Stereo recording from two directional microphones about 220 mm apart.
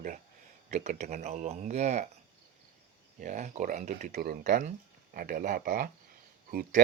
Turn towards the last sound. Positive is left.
turn(degrees=-40)  # may be behind; listen again after turning